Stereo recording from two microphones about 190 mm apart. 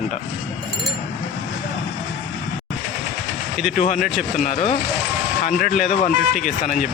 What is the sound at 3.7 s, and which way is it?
Speech, 40° left (ahead or behind).